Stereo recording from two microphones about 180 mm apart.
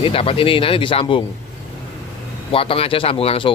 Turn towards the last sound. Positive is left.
turn(degrees=30)  # may be behind; listen again after turning